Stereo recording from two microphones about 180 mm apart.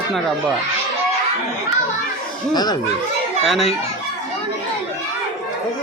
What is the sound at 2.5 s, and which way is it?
Speech, 20° left (ahead or behind).